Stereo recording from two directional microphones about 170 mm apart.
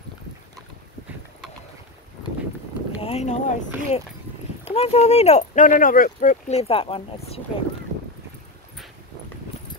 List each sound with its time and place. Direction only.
3.0 s speech: 35° left (ahead or behind)